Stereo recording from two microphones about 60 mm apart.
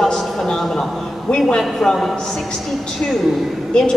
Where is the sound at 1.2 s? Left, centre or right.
Centre.